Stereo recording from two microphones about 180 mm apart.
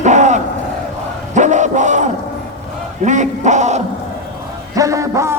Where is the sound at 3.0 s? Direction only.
40° right (ahead or behind).